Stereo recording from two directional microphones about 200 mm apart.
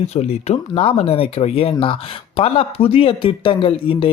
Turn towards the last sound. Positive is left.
turn(degrees=25)  # may be behind; listen again after turning